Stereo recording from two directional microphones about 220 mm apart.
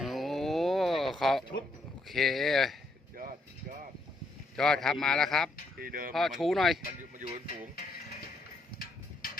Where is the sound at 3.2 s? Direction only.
40° right (ahead or behind).